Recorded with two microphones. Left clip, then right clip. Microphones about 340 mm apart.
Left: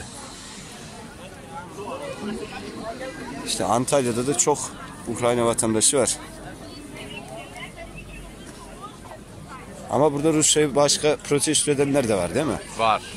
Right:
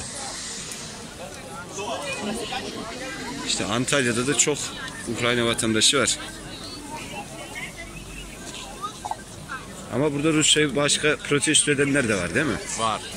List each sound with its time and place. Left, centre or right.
3.4 s speech: left
9.9 s speech: centre